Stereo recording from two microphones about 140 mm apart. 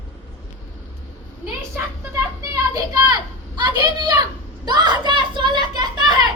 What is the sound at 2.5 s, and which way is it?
A child's voice, 25° right (ahead or behind).